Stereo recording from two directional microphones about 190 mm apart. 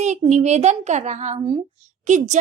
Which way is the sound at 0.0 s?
40° right (ahead or behind).